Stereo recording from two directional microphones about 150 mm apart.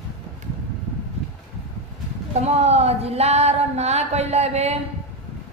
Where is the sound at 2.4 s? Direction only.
45° right (ahead or behind).